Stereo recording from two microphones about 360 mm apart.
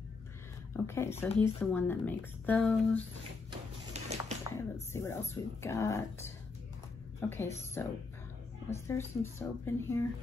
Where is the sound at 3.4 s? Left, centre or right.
Centre.